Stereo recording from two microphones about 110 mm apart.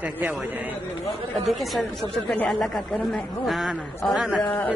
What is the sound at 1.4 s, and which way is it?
A man's voice, centre (ahead or behind).